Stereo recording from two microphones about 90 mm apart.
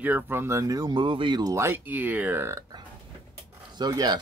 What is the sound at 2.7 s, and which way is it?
Burping, 50° right (ahead or behind).